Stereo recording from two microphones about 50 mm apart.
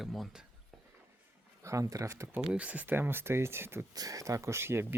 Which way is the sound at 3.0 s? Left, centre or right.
Right.